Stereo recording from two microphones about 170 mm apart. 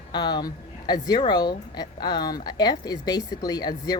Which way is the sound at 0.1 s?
25° left (ahead or behind).